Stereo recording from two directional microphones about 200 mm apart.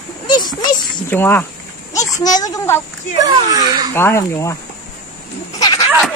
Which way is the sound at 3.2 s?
20° right (ahead or behind).